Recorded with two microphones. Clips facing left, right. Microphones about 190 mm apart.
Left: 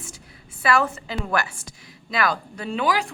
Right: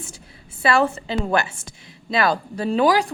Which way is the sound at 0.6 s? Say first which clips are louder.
Right 3 dB; 30° right (ahead or behind).